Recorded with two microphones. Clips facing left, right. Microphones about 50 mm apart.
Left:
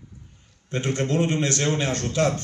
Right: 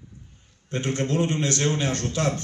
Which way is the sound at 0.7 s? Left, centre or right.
Left.